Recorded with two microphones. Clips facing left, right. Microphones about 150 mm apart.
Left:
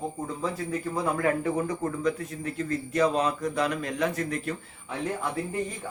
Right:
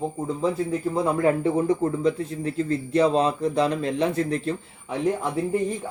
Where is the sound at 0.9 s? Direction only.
25° right (ahead or behind).